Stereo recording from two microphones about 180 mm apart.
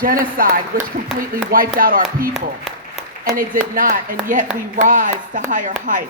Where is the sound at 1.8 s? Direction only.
50° right (ahead or behind).